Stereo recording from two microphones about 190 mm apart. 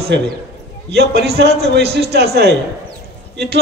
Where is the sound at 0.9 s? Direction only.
55° right (ahead or behind).